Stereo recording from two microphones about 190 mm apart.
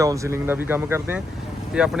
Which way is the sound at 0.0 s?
15° right (ahead or behind).